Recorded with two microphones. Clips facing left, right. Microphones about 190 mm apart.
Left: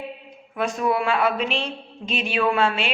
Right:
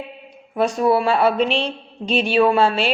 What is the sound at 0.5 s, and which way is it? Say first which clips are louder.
Speech: right 6 dB; 35° right (ahead or behind).